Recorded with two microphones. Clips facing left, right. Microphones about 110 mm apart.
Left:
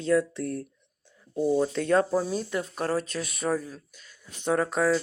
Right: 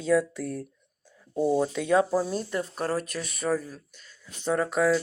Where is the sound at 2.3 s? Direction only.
Centre (ahead or behind).